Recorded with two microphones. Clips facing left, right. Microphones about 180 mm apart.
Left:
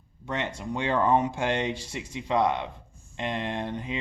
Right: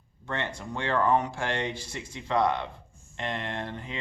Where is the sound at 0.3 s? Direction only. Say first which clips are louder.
Left 2 dB; 15° left (ahead or behind).